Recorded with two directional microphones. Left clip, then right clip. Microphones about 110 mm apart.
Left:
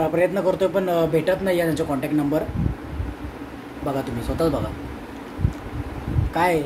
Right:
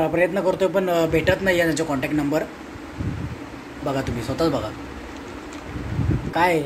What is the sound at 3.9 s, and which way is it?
Speech, 10° right (ahead or behind).